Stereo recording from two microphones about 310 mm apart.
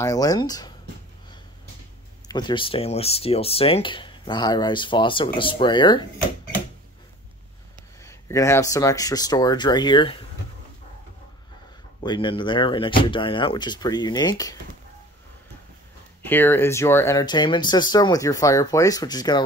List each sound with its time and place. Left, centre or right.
0.0 s speech: centre
2.2 s speech: centre
8.0 s speech: centre
12.0 s speech: centre
16.3 s speech: centre